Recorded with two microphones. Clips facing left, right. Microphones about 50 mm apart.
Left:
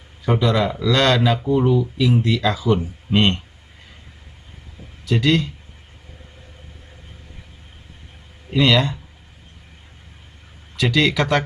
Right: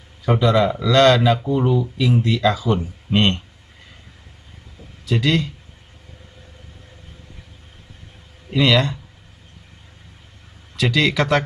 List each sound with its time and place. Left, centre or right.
0.2 s speech: centre
5.0 s speech: centre
8.5 s speech: centre
10.8 s speech: centre